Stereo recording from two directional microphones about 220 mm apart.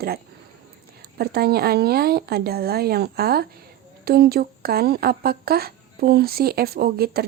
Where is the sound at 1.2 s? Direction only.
45° right (ahead or behind).